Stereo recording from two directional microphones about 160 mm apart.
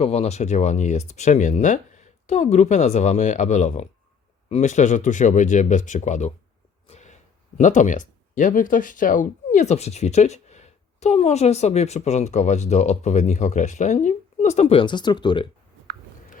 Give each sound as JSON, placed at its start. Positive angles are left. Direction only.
{"t": 0.0, "sound": "speech", "side_deg": 40}
{"t": 6.8, "sound": "a sound", "side_deg": 45}
{"t": 7.6, "sound": "speech", "side_deg": 50}